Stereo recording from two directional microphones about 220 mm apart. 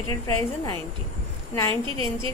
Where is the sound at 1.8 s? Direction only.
25° right (ahead or behind).